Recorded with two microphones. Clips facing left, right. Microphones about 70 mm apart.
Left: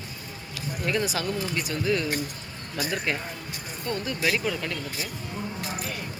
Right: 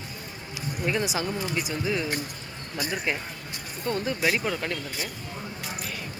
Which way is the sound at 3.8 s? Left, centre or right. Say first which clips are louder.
Right 2 dB; right.